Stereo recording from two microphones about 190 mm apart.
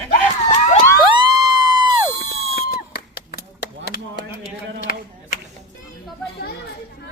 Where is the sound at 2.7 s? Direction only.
55° left (ahead or behind).